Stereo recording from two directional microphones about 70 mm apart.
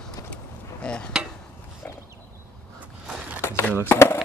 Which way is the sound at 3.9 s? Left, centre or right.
Left.